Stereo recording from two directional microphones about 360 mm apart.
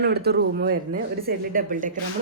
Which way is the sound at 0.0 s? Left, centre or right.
Right.